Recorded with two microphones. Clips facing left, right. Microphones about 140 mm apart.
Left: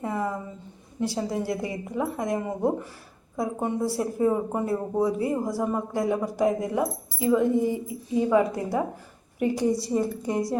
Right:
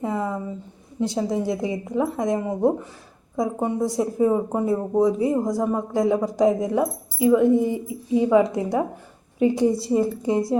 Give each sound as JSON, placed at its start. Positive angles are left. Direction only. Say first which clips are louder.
{"t": 0.0, "sound": "a woman's voice", "louder": "right 3 dB", "side_deg": -20}